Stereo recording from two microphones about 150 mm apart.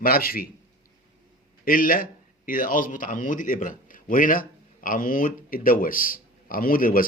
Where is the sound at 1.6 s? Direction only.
70° left (ahead or behind).